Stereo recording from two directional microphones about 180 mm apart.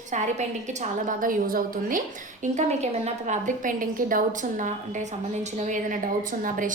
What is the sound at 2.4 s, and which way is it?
A woman's voice, 40° right (ahead or behind).